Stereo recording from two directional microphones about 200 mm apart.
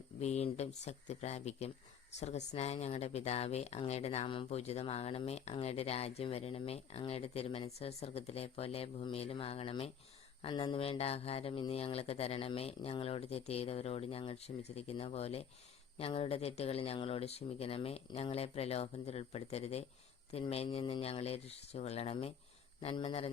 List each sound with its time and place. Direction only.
0.2 s speech: 35° left (ahead or behind)